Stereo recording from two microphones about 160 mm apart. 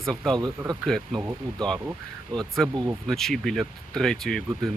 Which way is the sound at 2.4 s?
Centre (ahead or behind).